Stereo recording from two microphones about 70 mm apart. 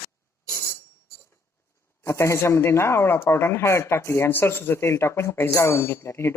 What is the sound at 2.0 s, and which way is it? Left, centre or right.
Speech, left.